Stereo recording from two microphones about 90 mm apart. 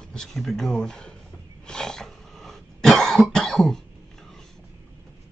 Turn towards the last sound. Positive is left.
turn(degrees=5)  # may be behind; listen again after turning